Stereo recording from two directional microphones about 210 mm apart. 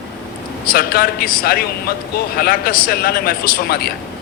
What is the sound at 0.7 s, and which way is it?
A man's voice, 45° left (ahead or behind).